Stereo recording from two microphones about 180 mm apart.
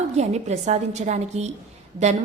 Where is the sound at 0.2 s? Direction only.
40° right (ahead or behind).